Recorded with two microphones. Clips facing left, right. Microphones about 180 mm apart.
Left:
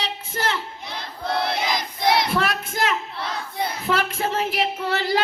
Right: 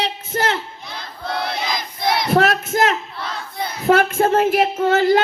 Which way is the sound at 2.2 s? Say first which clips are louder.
Right 7 dB; 45° right (ahead or behind).